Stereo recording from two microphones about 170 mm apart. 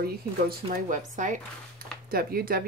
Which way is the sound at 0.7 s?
50° right (ahead or behind).